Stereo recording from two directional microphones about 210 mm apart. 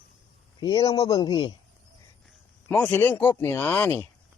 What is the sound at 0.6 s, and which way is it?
Speech, 20° left (ahead or behind).